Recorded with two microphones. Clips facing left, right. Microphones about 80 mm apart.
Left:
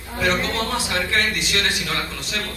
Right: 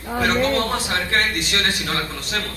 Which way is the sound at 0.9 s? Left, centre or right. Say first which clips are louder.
Right 1 dB; right.